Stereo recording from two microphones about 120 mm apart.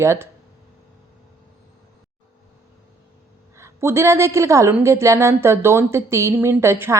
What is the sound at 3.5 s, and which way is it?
A woman's voice, 20° right (ahead or behind).